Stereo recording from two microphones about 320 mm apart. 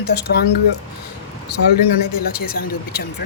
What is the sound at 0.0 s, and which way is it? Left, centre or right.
Speech, left.